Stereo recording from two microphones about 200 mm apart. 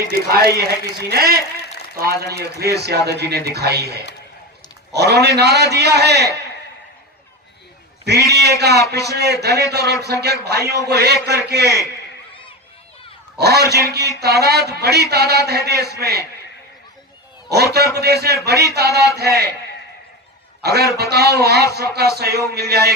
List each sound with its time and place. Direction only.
0.3 s a man's voice: 50° right (ahead or behind)
2.4 s a man's voice: 55° right (ahead or behind)
8.0 s a man's voice: 55° right (ahead or behind)
13.4 s a man's voice: 55° right (ahead or behind)
17.7 s a man's voice: 55° right (ahead or behind)
20.6 s a man's voice: 55° right (ahead or behind)